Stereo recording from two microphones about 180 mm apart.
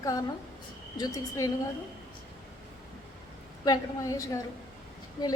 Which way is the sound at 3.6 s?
20° left (ahead or behind).